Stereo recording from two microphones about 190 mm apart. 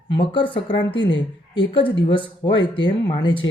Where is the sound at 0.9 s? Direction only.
75° left (ahead or behind).